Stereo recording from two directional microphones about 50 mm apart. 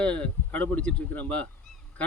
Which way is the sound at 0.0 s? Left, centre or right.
Left.